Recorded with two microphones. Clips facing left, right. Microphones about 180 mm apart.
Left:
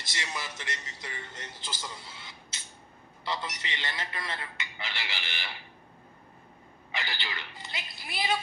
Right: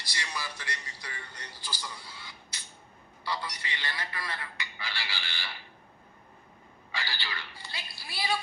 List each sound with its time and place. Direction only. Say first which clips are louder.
0.0 s a sound: left 1 dB; 20° left (ahead or behind)
3.2 s a man's voice: left 1 dB; 20° left (ahead or behind)
6.9 s a man's voice: left 1 dB; 20° left (ahead or behind)